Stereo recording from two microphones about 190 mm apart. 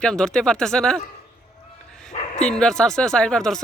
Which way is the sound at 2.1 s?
35° left (ahead or behind).